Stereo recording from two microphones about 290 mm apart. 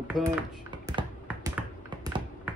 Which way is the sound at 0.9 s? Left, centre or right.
Centre.